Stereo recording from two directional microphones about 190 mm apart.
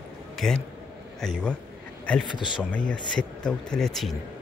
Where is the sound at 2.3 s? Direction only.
25° left (ahead or behind).